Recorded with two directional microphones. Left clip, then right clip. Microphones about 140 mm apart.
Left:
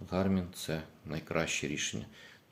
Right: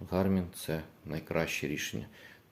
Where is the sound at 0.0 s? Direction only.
30° right (ahead or behind).